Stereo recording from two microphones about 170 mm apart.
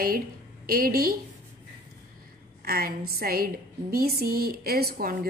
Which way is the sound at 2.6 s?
60° right (ahead or behind).